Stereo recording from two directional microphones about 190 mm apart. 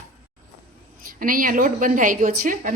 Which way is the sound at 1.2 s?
45° right (ahead or behind).